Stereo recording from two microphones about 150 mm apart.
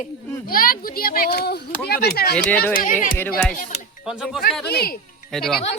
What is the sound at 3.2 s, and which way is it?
Speech, 10° left (ahead or behind).